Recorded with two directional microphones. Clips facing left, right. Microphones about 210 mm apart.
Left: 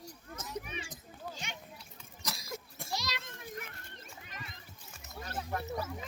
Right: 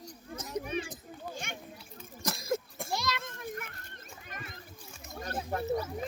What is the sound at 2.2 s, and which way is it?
Goat, 50° right (ahead or behind).